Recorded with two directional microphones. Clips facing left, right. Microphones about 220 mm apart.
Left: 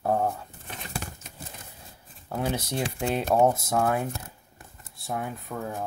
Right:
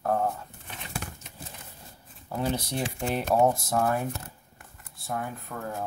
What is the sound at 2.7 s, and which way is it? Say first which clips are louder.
Speech: left 2 dB; 20° left (ahead or behind).